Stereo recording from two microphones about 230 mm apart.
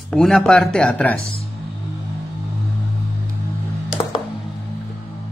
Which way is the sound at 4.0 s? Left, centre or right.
Centre.